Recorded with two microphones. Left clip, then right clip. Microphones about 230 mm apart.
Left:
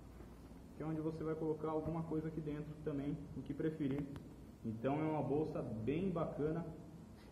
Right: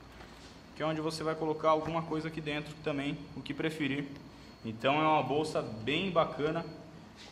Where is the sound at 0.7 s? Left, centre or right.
Right.